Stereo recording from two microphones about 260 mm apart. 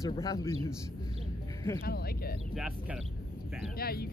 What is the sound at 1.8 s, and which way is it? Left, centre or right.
Speech, left.